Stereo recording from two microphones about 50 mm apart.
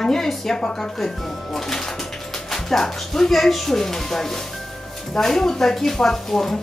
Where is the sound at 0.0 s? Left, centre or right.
Centre.